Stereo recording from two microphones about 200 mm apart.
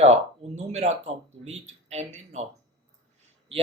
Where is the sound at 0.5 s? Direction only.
35° right (ahead or behind).